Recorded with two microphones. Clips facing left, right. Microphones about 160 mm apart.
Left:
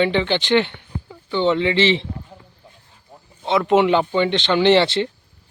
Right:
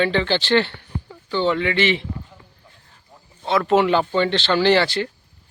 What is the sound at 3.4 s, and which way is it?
Speech, 20° left (ahead or behind).